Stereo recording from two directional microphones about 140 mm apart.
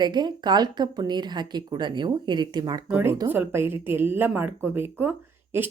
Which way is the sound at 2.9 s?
15° right (ahead or behind).